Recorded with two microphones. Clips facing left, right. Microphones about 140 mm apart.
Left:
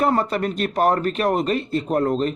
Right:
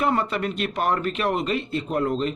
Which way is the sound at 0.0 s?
40° left (ahead or behind).